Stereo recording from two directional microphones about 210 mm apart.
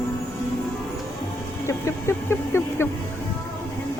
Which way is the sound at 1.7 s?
15° left (ahead or behind).